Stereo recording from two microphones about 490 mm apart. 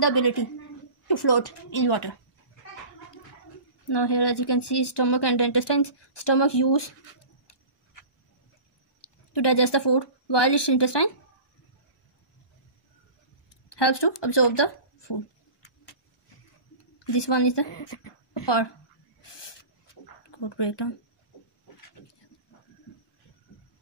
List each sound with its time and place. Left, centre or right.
0.0 s speech: left
3.9 s speech: left
9.3 s a woman's voice: left
13.7 s speech: left
17.0 s a woman's voice: left
20.2 s speech: left